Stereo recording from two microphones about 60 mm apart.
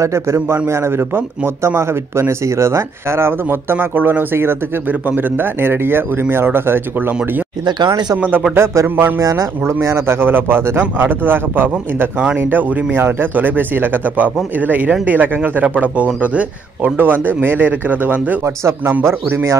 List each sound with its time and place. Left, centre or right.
0.0 s a man's voice: right
8.5 s speech: right
9.2 s speech: right
18.4 s a man's voice: right